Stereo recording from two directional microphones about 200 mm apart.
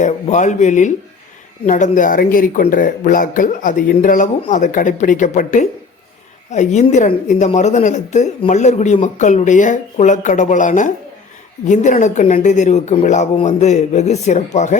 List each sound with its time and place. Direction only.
0.0 s a woman's voice: 35° left (ahead or behind)